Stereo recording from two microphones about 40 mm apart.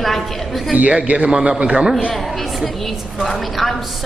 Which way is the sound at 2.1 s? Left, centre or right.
Centre.